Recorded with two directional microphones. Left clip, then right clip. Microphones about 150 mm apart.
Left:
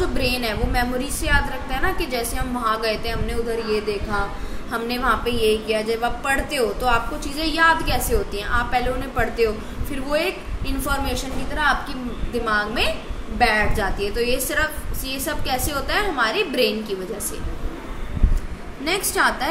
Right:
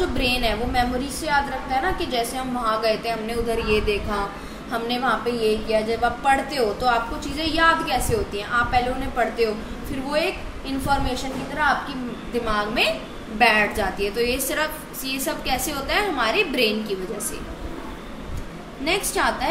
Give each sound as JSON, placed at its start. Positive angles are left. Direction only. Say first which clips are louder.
{"t": 0.2, "sound": "a woman's voice", "louder": "right 1 dB", "side_deg": 15}
{"t": 3.4, "sound": "a woman's voice", "louder": "right 2 dB", "side_deg": 0}
{"t": 4.6, "sound": "a woman's voice", "louder": "left 1 dB", "side_deg": 15}
{"t": 10.9, "sound": "a woman's voice", "louder": "right 2 dB", "side_deg": 20}
{"t": 12.4, "sound": "a woman's voice", "louder": "left 1 dB", "side_deg": 10}
{"t": 18.9, "sound": "a woman's voice", "louder": "left 2 dB", "side_deg": 20}